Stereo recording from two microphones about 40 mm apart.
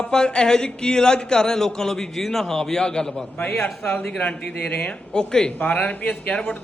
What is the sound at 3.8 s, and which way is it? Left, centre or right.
A man's voice, left.